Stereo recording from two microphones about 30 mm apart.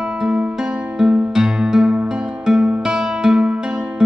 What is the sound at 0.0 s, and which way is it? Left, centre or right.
Music, right.